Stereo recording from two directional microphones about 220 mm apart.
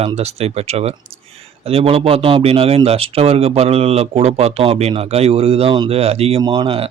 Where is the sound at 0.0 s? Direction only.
30° right (ahead or behind).